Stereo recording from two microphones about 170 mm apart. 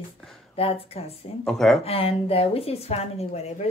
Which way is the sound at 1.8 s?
35° left (ahead or behind).